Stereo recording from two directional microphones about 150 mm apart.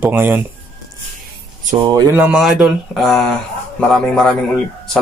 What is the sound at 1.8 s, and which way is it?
Speech, 25° right (ahead or behind).